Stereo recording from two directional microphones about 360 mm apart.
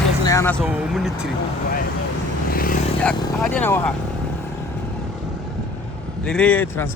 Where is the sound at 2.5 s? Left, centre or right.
Left.